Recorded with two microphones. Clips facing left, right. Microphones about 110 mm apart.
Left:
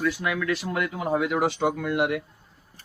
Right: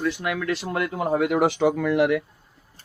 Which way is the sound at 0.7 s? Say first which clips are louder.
Right 4 dB; 50° right (ahead or behind).